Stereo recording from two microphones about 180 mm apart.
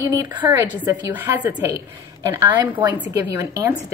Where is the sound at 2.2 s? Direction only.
20° right (ahead or behind).